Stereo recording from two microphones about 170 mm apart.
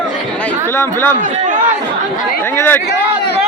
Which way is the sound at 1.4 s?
50° right (ahead or behind).